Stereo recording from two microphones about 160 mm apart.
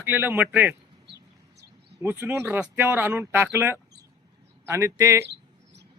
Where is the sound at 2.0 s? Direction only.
10° right (ahead or behind).